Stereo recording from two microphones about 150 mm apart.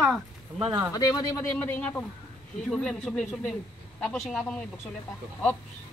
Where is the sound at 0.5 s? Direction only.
35° right (ahead or behind).